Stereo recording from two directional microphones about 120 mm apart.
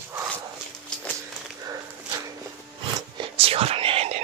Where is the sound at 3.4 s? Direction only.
55° right (ahead or behind).